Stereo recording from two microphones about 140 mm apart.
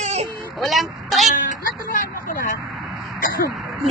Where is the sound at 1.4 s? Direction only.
80° left.